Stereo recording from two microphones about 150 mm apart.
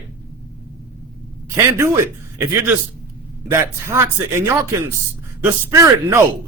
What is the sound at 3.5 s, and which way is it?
A man's voice, 20° right (ahead or behind).